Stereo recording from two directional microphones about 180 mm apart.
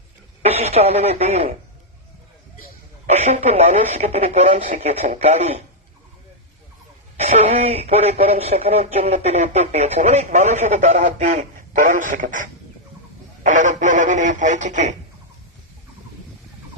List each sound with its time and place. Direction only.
0.4 s speech: 35° right (ahead or behind)
3.1 s speech: 40° right (ahead or behind)
7.2 s speech: 35° right (ahead or behind)